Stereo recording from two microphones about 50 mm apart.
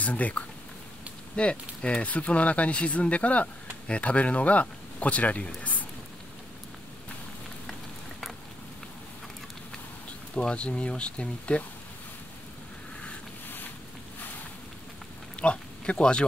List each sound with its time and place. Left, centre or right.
0.0 s speech: left
10.3 s speech: left
15.4 s speech: left